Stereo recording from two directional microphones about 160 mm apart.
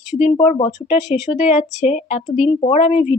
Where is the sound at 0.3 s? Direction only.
35° left (ahead or behind).